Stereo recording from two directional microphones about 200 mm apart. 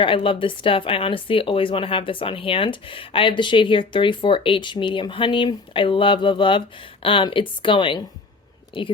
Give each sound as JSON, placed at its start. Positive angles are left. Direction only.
{"t": 0.0, "sound": "speech", "side_deg": 25}